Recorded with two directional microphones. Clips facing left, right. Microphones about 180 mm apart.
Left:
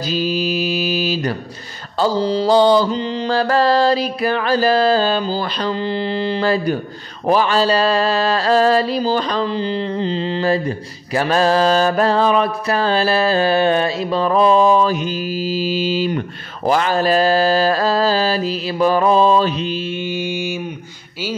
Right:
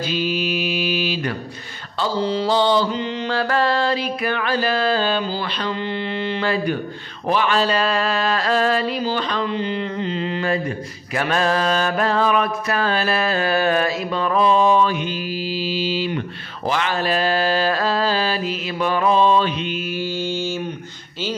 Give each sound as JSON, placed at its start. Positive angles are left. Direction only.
{"t": 0.0, "sound": "mantra", "side_deg": 40}